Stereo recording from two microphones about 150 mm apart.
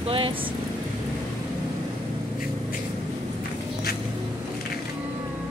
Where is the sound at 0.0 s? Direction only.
40° right (ahead or behind).